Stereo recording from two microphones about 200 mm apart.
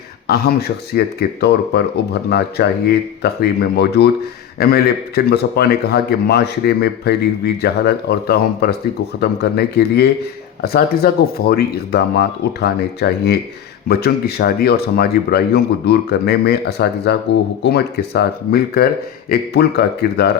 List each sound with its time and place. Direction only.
0.3 s speech: 50° left (ahead or behind)